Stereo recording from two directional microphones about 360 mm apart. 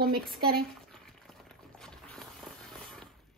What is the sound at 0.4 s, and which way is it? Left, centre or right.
Speech, right.